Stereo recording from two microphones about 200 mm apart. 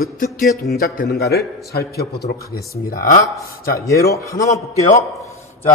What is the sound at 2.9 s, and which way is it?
Mantra, 40° left (ahead or behind).